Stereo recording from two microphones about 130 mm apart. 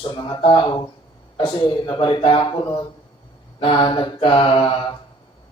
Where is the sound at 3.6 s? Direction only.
40° left (ahead or behind).